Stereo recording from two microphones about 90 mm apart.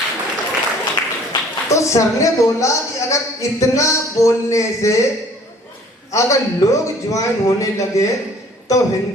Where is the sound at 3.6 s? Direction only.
35° left (ahead or behind).